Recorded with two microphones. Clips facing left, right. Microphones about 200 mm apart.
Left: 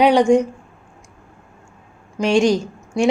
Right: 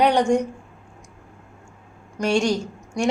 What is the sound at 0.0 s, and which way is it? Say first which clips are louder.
Speech: left 5 dB; 10° left (ahead or behind).